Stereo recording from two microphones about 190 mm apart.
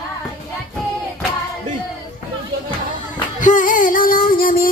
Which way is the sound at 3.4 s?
45° left (ahead or behind).